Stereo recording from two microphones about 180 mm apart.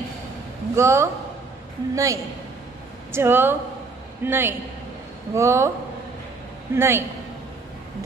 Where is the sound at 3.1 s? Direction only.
15° right (ahead or behind).